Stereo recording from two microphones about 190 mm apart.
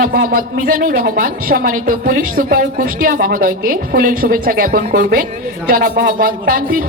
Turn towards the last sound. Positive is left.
turn(degrees=-50)  # may be behind; listen again after turning